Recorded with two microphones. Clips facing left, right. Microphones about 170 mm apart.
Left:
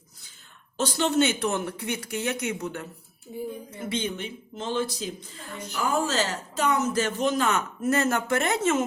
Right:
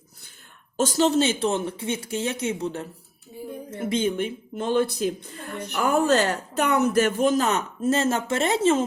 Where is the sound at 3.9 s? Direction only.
50° right (ahead or behind).